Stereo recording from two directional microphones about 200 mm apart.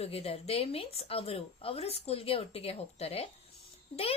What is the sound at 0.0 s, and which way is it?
A woman's voice, 30° left (ahead or behind).